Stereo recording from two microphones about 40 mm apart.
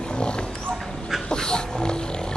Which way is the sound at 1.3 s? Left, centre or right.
Centre.